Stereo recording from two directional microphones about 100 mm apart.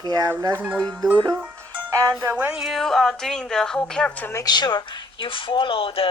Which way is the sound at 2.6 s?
Centre (ahead or behind).